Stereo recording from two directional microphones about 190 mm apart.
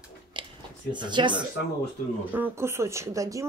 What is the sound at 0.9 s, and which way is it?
Speech, 25° right (ahead or behind).